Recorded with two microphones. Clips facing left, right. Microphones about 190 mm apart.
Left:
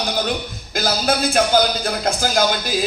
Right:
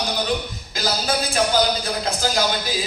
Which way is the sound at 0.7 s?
50° left (ahead or behind).